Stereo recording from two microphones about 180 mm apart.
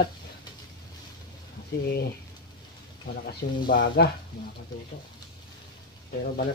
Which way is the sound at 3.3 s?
65° left (ahead or behind).